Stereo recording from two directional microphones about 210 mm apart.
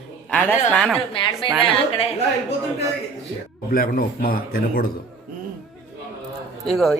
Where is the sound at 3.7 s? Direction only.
45° left (ahead or behind).